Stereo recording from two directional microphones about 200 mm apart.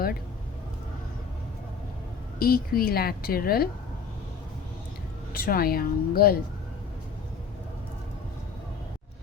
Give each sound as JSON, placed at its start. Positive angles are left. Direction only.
{"t": 2.4, "sound": "a woman's voice", "side_deg": 50}
{"t": 5.3, "sound": "a woman's voice", "side_deg": 45}